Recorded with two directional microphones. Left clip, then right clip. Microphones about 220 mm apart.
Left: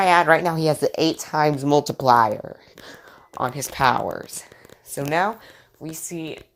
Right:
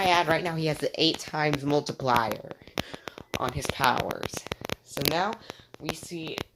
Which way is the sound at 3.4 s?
15° left (ahead or behind).